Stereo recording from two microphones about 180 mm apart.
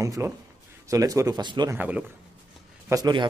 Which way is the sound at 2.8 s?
20° right (ahead or behind).